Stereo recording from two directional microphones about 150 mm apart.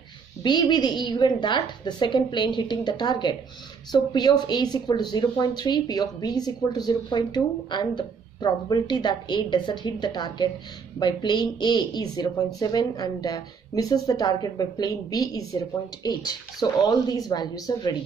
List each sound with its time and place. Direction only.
0.4 s a woman's voice: 30° left (ahead or behind)